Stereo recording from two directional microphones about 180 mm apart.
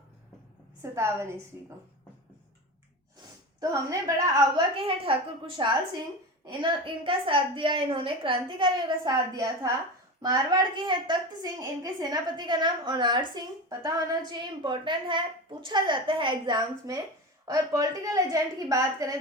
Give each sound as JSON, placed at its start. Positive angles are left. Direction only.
{"t": 0.8, "sound": "a woman's voice", "side_deg": -15}
{"t": 3.6, "sound": "a woman's voice", "side_deg": -20}